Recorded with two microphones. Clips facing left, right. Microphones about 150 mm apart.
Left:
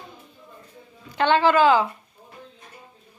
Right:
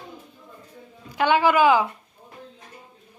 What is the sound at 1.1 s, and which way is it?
Speech, 10° right (ahead or behind).